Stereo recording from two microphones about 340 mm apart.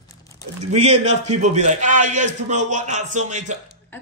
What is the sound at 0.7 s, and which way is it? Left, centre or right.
A man's voice, centre.